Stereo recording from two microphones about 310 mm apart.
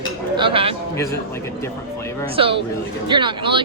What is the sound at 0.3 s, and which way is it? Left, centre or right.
Speech, centre.